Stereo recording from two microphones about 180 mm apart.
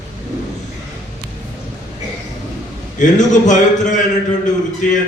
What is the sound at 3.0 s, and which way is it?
Speech, 45° left (ahead or behind).